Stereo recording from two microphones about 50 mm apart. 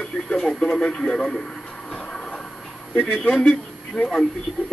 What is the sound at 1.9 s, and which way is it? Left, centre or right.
Train, centre.